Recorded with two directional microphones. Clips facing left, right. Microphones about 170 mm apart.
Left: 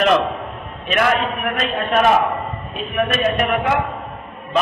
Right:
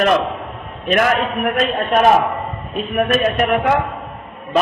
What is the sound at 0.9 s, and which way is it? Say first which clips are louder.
A man's voice: right 2 dB; 50° right (ahead or behind).